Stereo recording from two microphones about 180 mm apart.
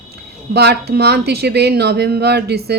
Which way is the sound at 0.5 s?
65° right (ahead or behind).